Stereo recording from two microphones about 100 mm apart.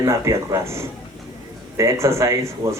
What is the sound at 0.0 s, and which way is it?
Speech, 30° right (ahead or behind).